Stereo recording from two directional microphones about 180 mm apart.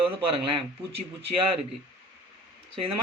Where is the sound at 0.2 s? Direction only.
30° right (ahead or behind).